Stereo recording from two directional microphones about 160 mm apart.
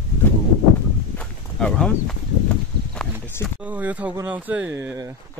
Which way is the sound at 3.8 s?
10° right (ahead or behind).